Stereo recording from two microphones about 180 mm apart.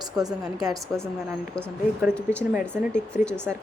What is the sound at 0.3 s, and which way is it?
Speech, centre (ahead or behind).